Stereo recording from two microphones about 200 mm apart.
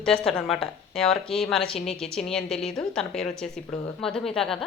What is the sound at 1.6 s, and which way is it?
Speech, 30° left (ahead or behind).